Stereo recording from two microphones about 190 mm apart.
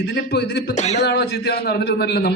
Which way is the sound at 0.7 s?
35° left (ahead or behind).